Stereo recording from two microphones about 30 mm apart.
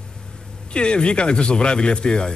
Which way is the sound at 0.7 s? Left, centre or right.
Left.